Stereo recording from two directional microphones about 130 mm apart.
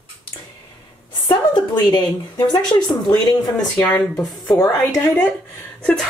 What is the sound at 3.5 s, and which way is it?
Speech, 10° left (ahead or behind).